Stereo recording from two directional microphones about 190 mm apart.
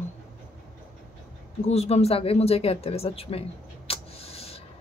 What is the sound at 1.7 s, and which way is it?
Speech, 35° left (ahead or behind).